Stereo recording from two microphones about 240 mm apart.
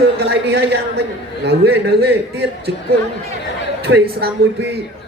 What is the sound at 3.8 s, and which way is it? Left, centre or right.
Speech, right.